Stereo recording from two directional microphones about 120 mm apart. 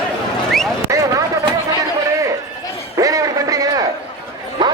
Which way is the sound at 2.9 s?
30° right (ahead or behind).